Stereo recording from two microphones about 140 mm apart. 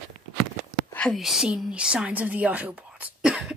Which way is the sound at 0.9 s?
5° left (ahead or behind).